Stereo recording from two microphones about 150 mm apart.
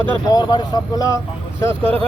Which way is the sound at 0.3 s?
30° left (ahead or behind).